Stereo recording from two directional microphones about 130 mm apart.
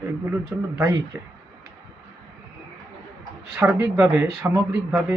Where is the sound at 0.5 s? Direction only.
10° right (ahead or behind).